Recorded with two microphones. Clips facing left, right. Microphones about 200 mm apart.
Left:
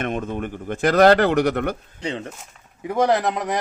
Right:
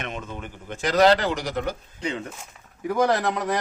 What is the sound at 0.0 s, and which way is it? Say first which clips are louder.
A man's voice: left 8 dB; 55° left (ahead or behind).